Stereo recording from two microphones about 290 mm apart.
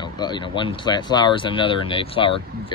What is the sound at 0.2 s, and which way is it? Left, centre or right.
Speech, centre.